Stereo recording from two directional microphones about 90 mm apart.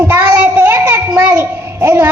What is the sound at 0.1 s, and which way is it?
Child singing, 20° right (ahead or behind).